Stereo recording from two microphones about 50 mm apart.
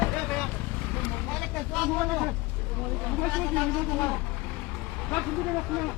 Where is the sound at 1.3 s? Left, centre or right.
Centre.